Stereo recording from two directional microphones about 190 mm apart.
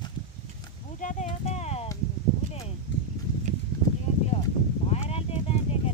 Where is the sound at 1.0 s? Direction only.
40° left (ahead or behind).